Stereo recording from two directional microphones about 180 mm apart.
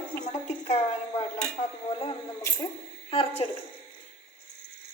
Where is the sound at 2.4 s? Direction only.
15° left (ahead or behind).